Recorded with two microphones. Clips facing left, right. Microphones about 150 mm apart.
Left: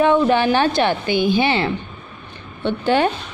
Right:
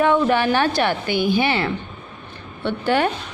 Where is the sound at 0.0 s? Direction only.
25° left (ahead or behind).